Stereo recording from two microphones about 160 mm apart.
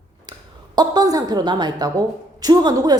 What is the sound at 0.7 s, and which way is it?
A woman's voice, 25° right (ahead or behind).